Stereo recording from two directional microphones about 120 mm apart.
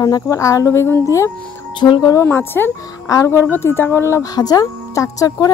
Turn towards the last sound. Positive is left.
turn(degrees=30)  # may be behind; listen again after turning